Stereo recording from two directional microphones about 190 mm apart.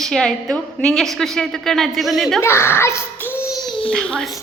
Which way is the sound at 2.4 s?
15° left (ahead or behind).